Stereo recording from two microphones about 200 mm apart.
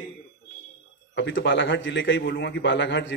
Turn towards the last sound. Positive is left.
turn(degrees=60)  # may be behind; listen again after turning